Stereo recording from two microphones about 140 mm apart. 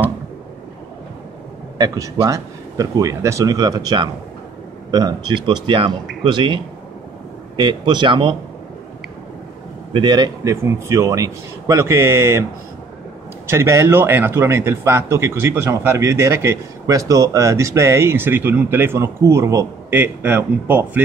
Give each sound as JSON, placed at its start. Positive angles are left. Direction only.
{"t": 1.8, "sound": "a man's voice", "side_deg": -25}
{"t": 9.9, "sound": "a man's voice", "side_deg": -35}
{"t": 13.5, "sound": "a man's voice", "side_deg": -20}